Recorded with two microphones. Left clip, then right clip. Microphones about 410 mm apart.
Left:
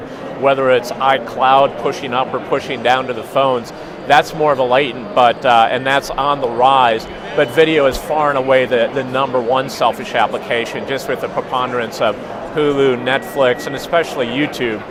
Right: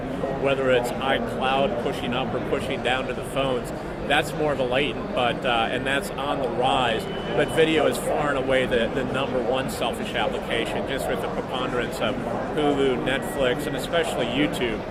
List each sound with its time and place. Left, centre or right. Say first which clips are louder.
0.4 s a man's voice: left 9 dB; left